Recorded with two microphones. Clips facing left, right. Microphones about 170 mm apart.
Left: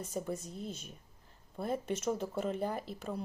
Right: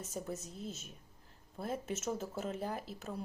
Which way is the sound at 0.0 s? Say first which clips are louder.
Left 4 dB; 5° right (ahead or behind).